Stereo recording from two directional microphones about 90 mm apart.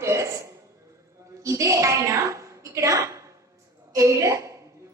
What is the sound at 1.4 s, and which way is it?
A woman's voice, 35° right (ahead or behind).